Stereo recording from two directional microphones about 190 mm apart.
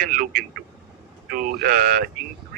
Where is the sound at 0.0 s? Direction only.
50° right (ahead or behind).